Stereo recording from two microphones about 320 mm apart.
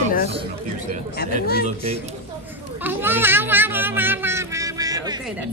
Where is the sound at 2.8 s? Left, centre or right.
Centre.